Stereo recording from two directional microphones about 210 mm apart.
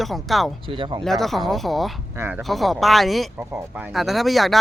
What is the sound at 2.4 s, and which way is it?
Speech, centre (ahead or behind).